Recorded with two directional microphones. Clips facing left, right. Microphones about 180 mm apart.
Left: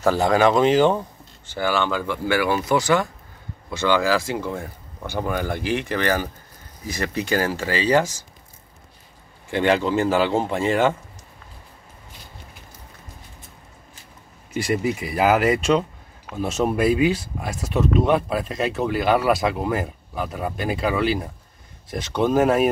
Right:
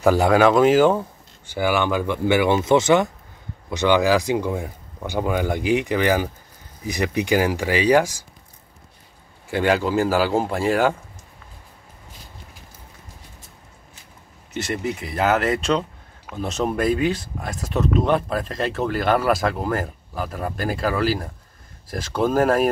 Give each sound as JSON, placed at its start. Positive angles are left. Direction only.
{"t": 0.0, "sound": "speech", "side_deg": -10}
{"t": 9.5, "sound": "speech", "side_deg": -5}
{"t": 14.5, "sound": "speech", "side_deg": 10}